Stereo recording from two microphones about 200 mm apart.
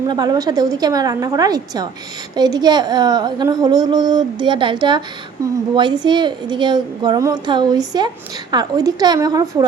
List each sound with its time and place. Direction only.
0.0 s a woman's voice: 20° right (ahead or behind)